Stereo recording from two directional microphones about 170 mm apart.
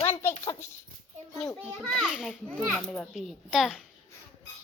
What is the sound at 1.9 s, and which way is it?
A child's voice, centre (ahead or behind).